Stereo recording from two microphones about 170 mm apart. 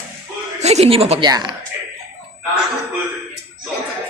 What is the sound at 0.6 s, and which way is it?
Speech, 40° right (ahead or behind).